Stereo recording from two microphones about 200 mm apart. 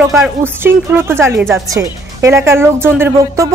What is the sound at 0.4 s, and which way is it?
Speech, 10° right (ahead or behind).